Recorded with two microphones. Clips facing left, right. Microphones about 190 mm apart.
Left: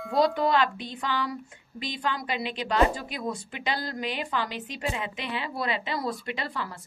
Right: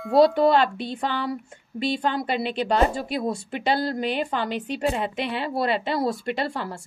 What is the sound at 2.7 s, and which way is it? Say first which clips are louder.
Speech: right 1 dB; 35° right (ahead or behind).